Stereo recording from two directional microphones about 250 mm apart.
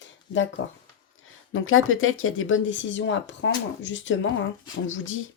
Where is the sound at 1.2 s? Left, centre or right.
Left.